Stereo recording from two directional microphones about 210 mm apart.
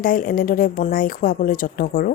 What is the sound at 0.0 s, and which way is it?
Speech, 40° left (ahead or behind).